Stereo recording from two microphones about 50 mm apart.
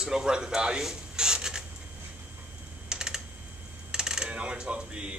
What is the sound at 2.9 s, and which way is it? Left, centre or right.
Typing, centre.